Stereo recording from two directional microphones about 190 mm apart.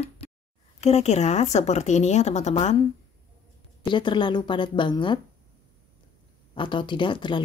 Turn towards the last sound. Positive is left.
turn(degrees=25)  # may be behind; listen again after turning